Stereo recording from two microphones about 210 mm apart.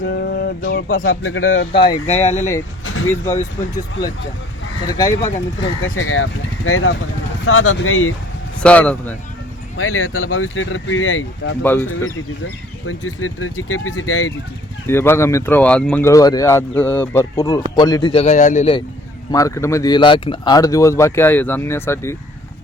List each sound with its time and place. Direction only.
0.0 s a sound: 55° left (ahead or behind)
1.0 s speech: 70° left (ahead or behind)
1.8 s speech: 20° left (ahead or behind)
2.2 s speech: 35° left (ahead or behind)
2.8 s vehicle: 75° left (ahead or behind)
4.9 s speech: 15° left (ahead or behind)
5.8 s speech: 70° left (ahead or behind)
6.7 s speech: 85° left
8.6 s speech: 5° left (ahead or behind)
9.7 s speech: 90° left; by 11.5 s 70° left (ahead or behind)
11.6 s speech: 10° left (ahead or behind)
12.9 s speech: 90° left
14.8 s speech: 10° left (ahead or behind); by 18.8 s 30° left (ahead or behind)
19.3 s speech: 15° left (ahead or behind)